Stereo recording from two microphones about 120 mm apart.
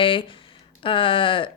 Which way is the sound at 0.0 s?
45° left (ahead or behind).